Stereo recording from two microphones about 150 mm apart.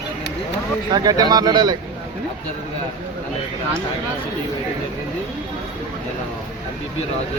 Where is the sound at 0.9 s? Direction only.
25° right (ahead or behind).